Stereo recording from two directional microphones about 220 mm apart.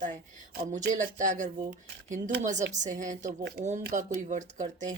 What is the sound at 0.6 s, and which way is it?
Speech, 35° right (ahead or behind).